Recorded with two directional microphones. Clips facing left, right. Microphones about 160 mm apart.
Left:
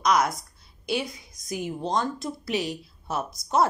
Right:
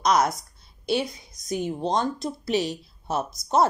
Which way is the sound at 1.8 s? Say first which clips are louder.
Even; 20° right (ahead or behind).